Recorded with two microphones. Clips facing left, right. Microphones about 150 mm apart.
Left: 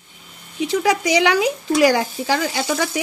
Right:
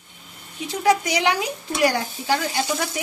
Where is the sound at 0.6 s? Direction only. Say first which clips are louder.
Left 2 dB; 90° left.